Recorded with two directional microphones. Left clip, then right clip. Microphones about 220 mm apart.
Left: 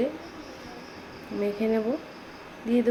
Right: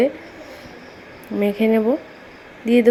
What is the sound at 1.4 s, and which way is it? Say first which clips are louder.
A woman's voice: right 9 dB; 30° right (ahead or behind).